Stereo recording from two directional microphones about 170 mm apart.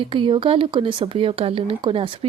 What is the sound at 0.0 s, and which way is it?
Speech, 30° right (ahead or behind).